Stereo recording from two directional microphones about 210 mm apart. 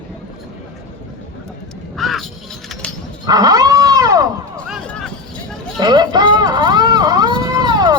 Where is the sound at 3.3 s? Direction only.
20° right (ahead or behind).